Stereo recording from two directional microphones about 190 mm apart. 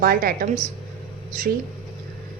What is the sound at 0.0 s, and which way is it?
Speech, 50° right (ahead or behind).